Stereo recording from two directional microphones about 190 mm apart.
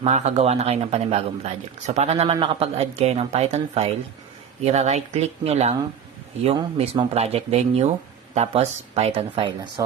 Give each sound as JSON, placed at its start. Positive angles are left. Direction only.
{"t": 0.0, "sound": "speech", "side_deg": -35}